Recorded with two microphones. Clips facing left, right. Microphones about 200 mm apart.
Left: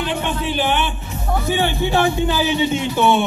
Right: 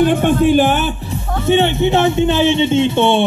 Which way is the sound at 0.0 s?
50° right (ahead or behind).